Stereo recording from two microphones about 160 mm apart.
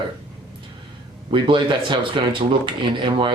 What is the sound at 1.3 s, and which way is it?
Speech, 30° right (ahead or behind).